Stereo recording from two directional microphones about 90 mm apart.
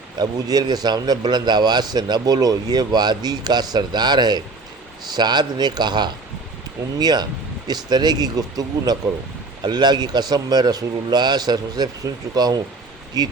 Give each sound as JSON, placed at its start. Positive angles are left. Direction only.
{"t": 0.2, "sound": "a man's voice", "side_deg": -45}